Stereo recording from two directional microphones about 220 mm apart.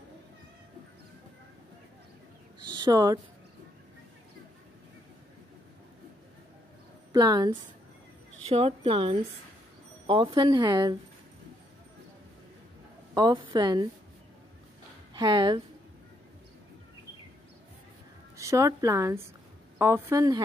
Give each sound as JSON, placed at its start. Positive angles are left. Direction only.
{"t": 2.7, "sound": "a woman's voice", "side_deg": -20}
{"t": 7.1, "sound": "a woman's voice", "side_deg": -15}
{"t": 13.1, "sound": "speech", "side_deg": -20}
{"t": 15.1, "sound": "speech", "side_deg": -20}
{"t": 18.4, "sound": "speech", "side_deg": -15}